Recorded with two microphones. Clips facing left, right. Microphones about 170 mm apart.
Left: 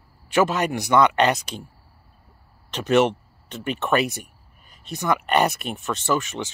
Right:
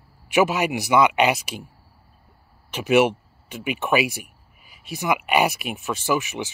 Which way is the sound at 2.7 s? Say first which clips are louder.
Right 1 dB; 10° right (ahead or behind).